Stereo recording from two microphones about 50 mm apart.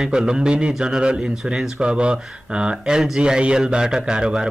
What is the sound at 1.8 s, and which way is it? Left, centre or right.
Speech, right.